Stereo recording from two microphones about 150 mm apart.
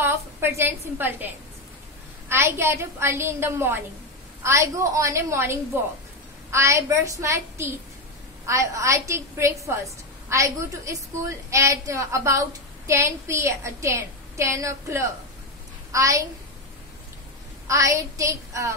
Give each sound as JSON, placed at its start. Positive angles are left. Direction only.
{"t": 0.0, "sound": "a woman's voice", "side_deg": -15}
{"t": 17.6, "sound": "a woman's voice", "side_deg": -20}